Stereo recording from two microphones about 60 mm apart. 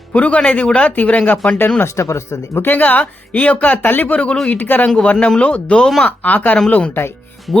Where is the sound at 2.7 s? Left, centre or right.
Left.